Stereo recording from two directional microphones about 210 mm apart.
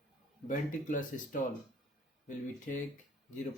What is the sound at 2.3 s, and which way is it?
Speech, 40° left (ahead or behind).